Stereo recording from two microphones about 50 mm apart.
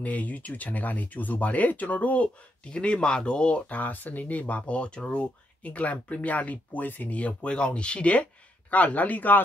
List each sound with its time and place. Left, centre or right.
0.0 s speech: left